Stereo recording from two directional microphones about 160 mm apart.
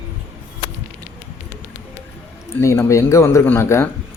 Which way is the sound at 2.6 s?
15° left (ahead or behind).